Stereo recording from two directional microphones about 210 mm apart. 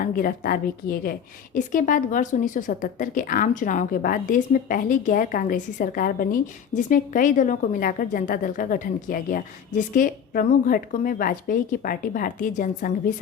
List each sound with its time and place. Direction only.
0.0 s a woman's voice: 45° left (ahead or behind)